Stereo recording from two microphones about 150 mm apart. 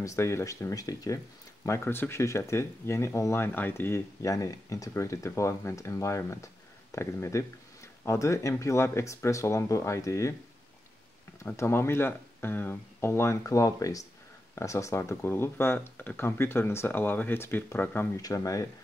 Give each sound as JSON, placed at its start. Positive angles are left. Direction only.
{"t": 0.0, "sound": "speech", "side_deg": 20}
{"t": 11.4, "sound": "speech", "side_deg": 15}